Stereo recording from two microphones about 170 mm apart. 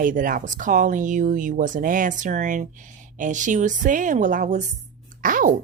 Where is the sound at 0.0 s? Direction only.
55° right (ahead or behind).